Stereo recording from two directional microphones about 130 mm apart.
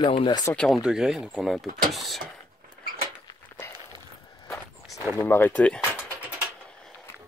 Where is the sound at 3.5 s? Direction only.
15° left (ahead or behind).